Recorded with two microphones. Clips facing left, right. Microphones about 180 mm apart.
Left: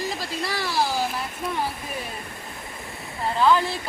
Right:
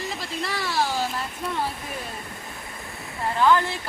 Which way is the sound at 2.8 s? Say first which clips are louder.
Even; centre (ahead or behind).